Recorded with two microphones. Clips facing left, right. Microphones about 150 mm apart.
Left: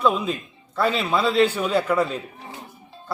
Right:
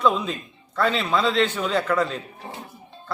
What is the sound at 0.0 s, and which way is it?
Speech, 5° left (ahead or behind).